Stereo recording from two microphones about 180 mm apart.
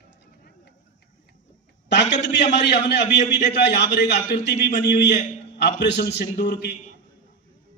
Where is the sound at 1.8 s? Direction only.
75° left (ahead or behind).